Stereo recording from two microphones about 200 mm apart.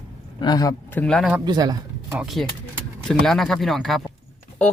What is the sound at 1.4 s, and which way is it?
Speech, 20° right (ahead or behind).